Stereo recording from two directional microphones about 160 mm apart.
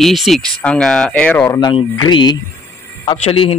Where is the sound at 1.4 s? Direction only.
25° left (ahead or behind).